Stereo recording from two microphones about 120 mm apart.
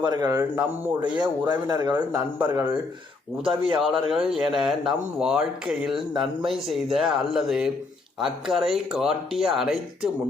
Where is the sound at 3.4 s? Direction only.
45° right (ahead or behind).